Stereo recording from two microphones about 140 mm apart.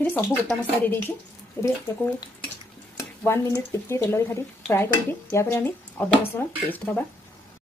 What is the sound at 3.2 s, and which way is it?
A woman's voice, 15° left (ahead or behind).